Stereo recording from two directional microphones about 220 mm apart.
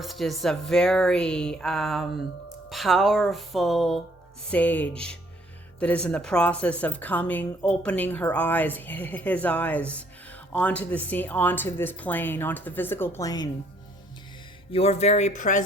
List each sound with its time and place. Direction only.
0.0 s speech: centre (ahead or behind); by 13.5 s 15° left (ahead or behind)
14.7 s speech: 25° left (ahead or behind)